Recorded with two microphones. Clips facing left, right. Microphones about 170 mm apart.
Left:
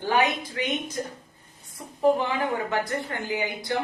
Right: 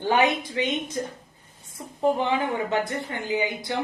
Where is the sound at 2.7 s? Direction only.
20° right (ahead or behind).